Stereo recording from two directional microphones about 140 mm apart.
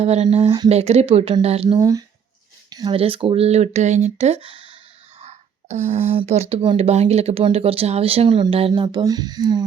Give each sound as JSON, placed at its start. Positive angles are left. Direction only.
{"t": 0.0, "sound": "speech", "side_deg": -50}
{"t": 1.8, "sound": "speech", "side_deg": -25}
{"t": 2.6, "sound": "a sound", "side_deg": -30}
{"t": 3.0, "sound": "speech", "side_deg": -40}
{"t": 4.4, "sound": "a sound", "side_deg": -35}
{"t": 5.2, "sound": "speech", "side_deg": -55}